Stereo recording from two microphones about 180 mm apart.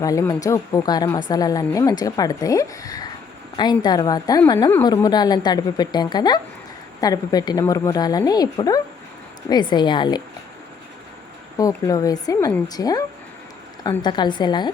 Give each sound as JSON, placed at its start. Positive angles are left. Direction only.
{"t": 0.0, "sound": "a woman's voice", "side_deg": 20}
{"t": 11.5, "sound": "a woman's voice", "side_deg": 20}